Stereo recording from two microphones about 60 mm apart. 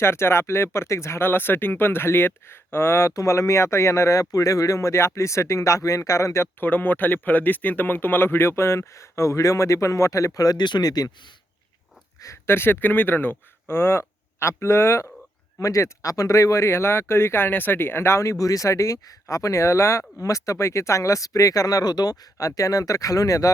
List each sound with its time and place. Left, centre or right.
0.0 s speech: left
1.3 s speech: left
3.1 s speech: left
6.6 s speech: left
12.5 s speech: left